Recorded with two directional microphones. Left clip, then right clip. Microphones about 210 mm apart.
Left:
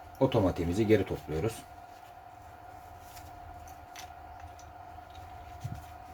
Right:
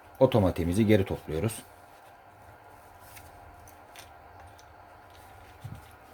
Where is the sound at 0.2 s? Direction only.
50° right (ahead or behind).